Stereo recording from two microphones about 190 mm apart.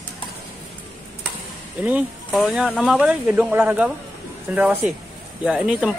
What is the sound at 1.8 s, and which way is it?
Speech, 5° right (ahead or behind).